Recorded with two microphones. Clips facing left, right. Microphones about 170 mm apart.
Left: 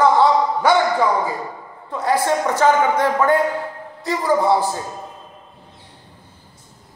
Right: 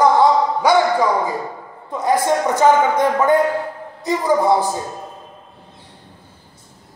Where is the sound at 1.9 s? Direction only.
15° right (ahead or behind).